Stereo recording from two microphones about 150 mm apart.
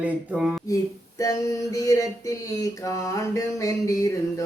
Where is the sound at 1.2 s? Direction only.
20° left (ahead or behind).